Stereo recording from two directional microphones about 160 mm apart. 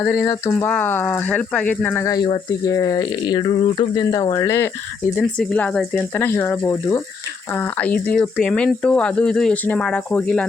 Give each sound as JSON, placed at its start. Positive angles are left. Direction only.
{"t": 0.0, "sound": "speech", "side_deg": 10}
{"t": 2.0, "sound": "speech", "side_deg": 25}
{"t": 5.1, "sound": "speech", "side_deg": 5}
{"t": 6.1, "sound": "speech", "side_deg": 15}